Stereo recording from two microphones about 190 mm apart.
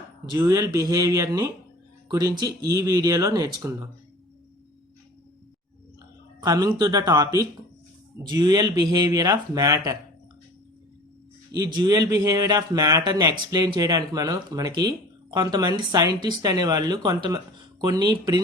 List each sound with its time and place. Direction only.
0.3 s speech: 15° right (ahead or behind)
6.4 s speech: 20° right (ahead or behind)
11.5 s speech: 20° right (ahead or behind)